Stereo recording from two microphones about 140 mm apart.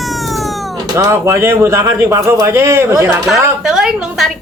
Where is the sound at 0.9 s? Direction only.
20° right (ahead or behind).